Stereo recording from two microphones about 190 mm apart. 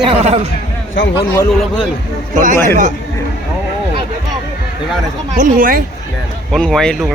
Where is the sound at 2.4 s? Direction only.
45° right (ahead or behind).